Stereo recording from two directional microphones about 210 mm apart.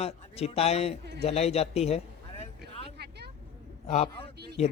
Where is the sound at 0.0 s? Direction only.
30° left (ahead or behind).